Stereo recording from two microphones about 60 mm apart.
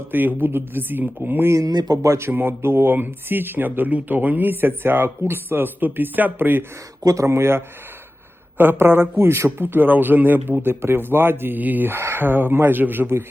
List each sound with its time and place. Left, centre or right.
0.1 s a man's voice: right
1.5 s speech: right
2.3 s a man's voice: right
7.0 s speech: right
7.3 s speech: right
8.5 s a man's voice: right